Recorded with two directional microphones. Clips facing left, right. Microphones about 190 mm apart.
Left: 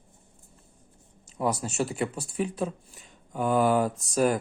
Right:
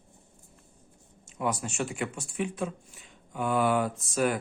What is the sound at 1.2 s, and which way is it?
Speech, 35° left (ahead or behind).